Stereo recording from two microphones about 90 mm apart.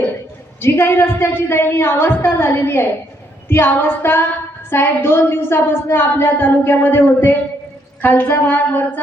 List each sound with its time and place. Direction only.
0.6 s speech: 25° left (ahead or behind)